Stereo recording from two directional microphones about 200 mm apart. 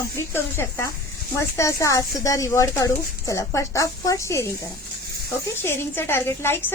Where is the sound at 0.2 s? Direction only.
10° left (ahead or behind).